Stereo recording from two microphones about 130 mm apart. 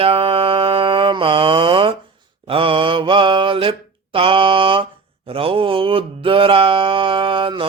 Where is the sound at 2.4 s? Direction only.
45° right (ahead or behind).